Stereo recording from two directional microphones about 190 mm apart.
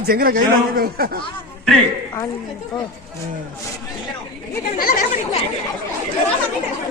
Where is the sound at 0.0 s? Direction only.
50° right (ahead or behind).